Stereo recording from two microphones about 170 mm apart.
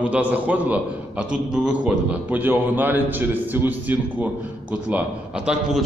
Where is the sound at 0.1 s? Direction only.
10° right (ahead or behind).